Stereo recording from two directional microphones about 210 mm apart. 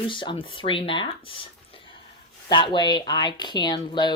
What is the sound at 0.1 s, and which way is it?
Speech, 25° left (ahead or behind).